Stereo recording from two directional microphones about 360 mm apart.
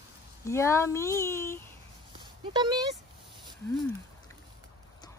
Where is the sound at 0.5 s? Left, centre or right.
Centre.